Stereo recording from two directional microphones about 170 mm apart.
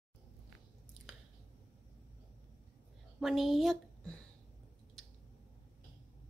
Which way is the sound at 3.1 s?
Centre (ahead or behind).